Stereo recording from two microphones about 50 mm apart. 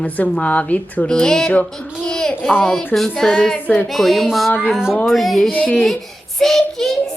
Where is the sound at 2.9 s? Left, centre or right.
Centre.